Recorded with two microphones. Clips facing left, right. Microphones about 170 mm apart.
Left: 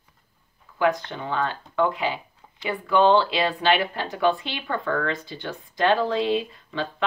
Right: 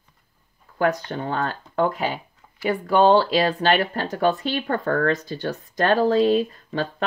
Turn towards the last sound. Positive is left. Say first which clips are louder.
# right 4 dB
turn(degrees=-45)  # may be behind; listen again after turning